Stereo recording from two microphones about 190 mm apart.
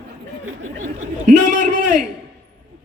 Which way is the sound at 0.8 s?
45° right (ahead or behind).